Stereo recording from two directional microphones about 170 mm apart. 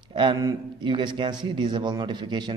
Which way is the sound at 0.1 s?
30° right (ahead or behind).